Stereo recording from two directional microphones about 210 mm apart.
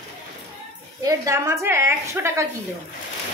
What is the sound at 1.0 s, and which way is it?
A woman's voice, 15° right (ahead or behind).